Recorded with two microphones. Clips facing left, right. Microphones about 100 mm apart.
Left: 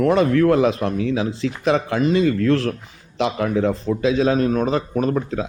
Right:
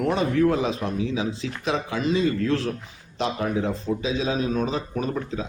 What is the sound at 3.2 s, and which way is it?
A man's voice, 75° left (ahead or behind).